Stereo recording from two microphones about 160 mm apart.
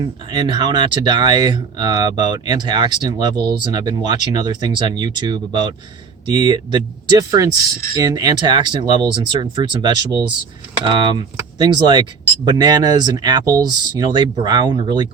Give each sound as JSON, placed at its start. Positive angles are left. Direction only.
{"t": 0.0, "sound": "speech", "side_deg": -30}